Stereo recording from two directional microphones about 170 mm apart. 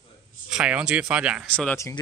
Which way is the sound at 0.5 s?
5° right (ahead or behind).